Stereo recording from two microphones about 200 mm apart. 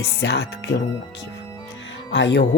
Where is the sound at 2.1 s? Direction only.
60° left (ahead or behind).